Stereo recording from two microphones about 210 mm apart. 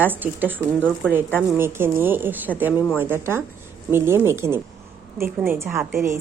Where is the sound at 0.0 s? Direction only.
10° right (ahead or behind).